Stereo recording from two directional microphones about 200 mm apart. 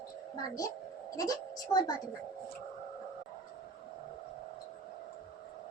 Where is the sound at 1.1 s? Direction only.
15° left (ahead or behind).